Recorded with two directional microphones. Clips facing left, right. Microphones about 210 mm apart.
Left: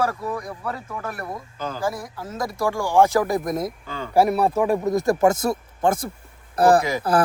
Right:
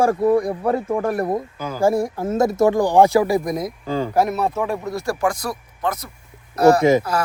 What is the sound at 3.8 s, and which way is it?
Speech, 35° right (ahead or behind).